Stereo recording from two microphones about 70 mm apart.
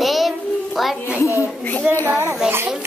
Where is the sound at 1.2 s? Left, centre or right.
Left.